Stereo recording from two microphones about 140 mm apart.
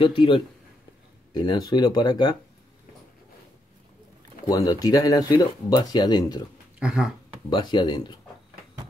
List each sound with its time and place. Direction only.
0.0 s speech: 40° left (ahead or behind)
4.5 s speech: 25° left (ahead or behind)
6.8 s speech: 5° right (ahead or behind)
7.4 s speech: 35° left (ahead or behind)